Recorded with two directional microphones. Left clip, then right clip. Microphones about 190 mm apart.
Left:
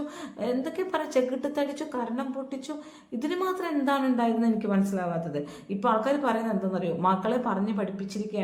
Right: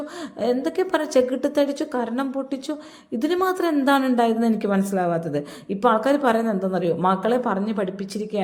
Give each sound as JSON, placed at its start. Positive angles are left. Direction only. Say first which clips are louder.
{"t": 0.4, "sound": "a woman's voice", "louder": "right 7 dB", "side_deg": -35}